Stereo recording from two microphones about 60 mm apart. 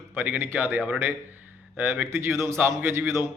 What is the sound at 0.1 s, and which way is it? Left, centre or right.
Speech, right.